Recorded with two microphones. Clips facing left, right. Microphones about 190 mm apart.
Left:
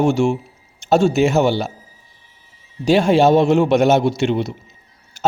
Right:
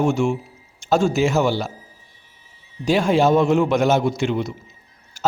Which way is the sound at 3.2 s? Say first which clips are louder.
Left 3 dB; 75° left (ahead or behind).